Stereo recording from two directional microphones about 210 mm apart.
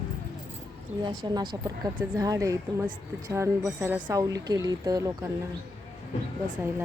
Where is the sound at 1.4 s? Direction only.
45° right (ahead or behind).